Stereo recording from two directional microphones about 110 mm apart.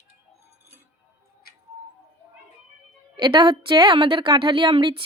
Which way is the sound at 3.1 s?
45° right (ahead or behind).